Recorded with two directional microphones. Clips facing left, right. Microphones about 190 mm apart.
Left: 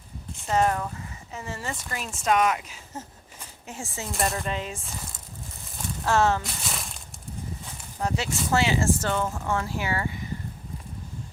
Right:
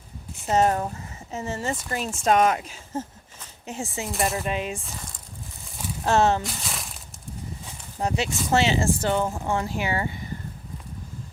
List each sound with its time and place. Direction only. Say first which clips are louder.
0.5 s speech: right 2 dB; 25° right (ahead or behind)
3.7 s speech: right 5 dB; 20° right (ahead or behind)
4.1 s speech: right 1 dB; centre (ahead or behind)
4.4 s speech: right 3 dB; 15° right (ahead or behind)
6.1 s speech: right 2 dB; 20° right (ahead or behind)
6.4 s a sound: right 1 dB; centre (ahead or behind)
7.9 s speech: right 2 dB; 20° right (ahead or behind)